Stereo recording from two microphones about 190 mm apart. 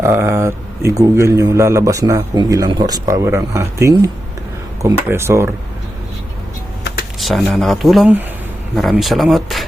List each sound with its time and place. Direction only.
0.0 s a man's voice: 15° right (ahead or behind)
7.2 s speech: centre (ahead or behind)